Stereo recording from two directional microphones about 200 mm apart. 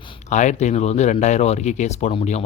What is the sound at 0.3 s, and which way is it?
Speech, 35° left (ahead or behind).